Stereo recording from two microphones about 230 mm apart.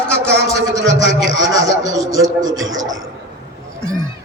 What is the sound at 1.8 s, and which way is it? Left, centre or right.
Speech, centre.